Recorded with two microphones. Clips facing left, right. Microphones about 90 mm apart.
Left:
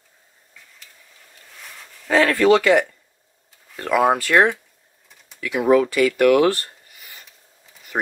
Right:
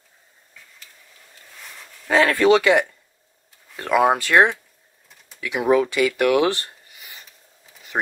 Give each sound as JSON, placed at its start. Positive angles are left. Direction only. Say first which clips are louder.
{"t": 2.0, "sound": "speech", "louder": "left 1 dB", "side_deg": -20}